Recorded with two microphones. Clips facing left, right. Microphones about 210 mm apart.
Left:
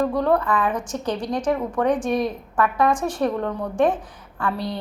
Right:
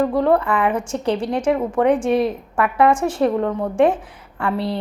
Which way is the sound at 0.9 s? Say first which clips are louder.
Right 5 dB; 60° right (ahead or behind).